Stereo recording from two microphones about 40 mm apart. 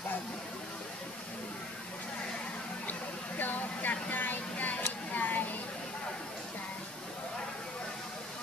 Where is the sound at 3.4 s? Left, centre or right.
Left.